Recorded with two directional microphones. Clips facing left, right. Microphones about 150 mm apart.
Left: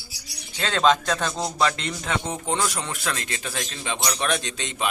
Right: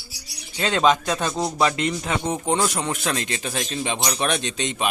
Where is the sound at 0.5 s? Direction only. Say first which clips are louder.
Right 1 dB; 15° right (ahead or behind).